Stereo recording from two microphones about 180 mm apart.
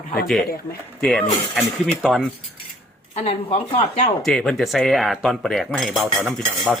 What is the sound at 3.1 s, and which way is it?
Speech, 35° left (ahead or behind).